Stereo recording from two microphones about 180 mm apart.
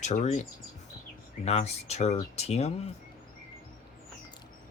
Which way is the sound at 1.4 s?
35° left (ahead or behind).